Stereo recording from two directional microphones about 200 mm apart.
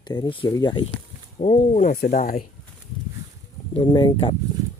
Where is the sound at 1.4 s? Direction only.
35° left (ahead or behind).